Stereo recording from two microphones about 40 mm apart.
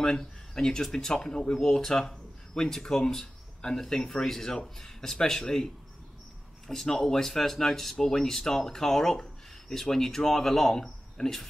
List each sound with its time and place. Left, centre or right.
0.0 s speech: centre
6.7 s speech: centre